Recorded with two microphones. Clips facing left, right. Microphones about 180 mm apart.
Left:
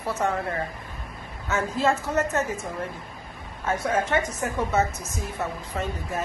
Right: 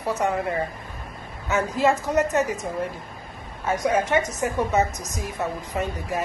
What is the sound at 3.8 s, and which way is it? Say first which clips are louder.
A man's voice: right 3 dB; 15° right (ahead or behind).